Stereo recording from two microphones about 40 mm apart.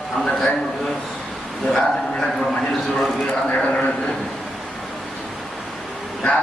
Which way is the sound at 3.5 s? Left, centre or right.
Left.